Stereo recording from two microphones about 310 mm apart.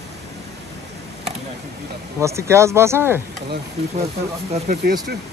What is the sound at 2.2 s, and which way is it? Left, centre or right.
Speech, centre.